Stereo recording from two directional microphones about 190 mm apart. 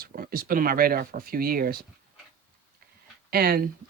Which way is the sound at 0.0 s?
50° right (ahead or behind).